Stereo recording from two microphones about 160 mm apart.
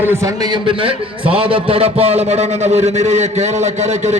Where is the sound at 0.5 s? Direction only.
35° right (ahead or behind).